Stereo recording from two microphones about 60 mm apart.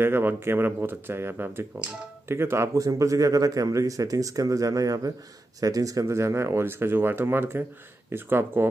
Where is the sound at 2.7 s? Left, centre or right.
Right.